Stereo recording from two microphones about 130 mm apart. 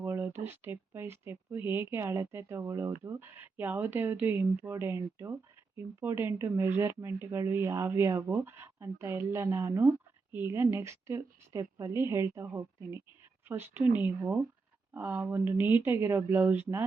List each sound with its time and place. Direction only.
0.0 s a woman's voice: 20° right (ahead or behind)